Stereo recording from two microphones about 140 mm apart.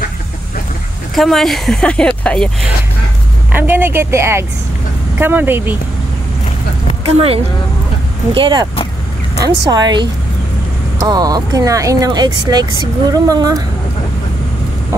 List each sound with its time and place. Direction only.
1.1 s speech: centre (ahead or behind)
3.5 s a woman's voice: 15° right (ahead or behind)
7.1 s speech: 45° right (ahead or behind)
8.4 s speech: 35° right (ahead or behind)